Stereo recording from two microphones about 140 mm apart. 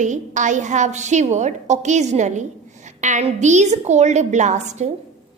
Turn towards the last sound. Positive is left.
turn(degrees=-55)  # may be behind; listen again after turning